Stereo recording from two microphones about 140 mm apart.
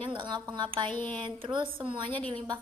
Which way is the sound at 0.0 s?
35° right (ahead or behind).